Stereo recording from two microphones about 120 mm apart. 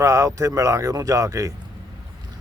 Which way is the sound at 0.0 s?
25° right (ahead or behind).